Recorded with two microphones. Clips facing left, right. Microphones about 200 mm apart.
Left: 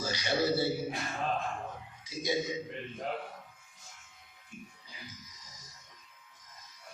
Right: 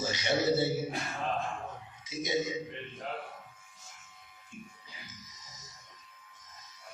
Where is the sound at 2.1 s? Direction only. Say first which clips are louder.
Right 3 dB; 20° right (ahead or behind).